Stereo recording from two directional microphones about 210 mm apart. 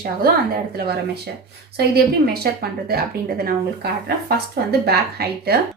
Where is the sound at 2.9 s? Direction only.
45° right (ahead or behind).